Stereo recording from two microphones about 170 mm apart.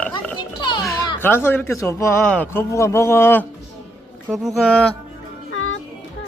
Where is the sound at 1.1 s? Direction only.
15° left (ahead or behind).